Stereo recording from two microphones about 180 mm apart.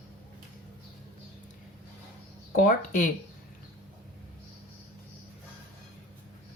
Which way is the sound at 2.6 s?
50° left (ahead or behind).